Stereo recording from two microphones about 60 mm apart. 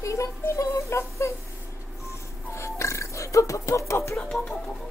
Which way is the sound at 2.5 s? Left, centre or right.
Left.